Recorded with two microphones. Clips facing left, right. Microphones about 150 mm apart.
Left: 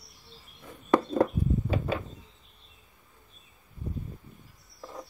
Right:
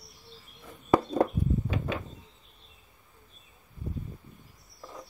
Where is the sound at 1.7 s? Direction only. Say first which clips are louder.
Left 3 dB; 35° left (ahead or behind).